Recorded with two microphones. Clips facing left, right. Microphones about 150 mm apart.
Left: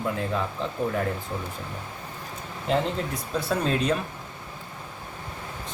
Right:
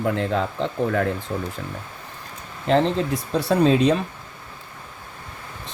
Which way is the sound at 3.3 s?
80° right.